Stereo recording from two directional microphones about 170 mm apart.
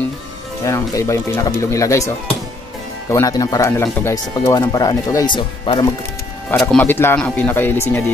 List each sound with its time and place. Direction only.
0.7 s speech: 20° left (ahead or behind)
6.7 s speech: 10° left (ahead or behind)